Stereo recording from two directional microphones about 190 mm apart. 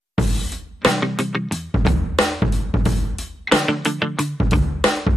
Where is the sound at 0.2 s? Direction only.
Centre (ahead or behind).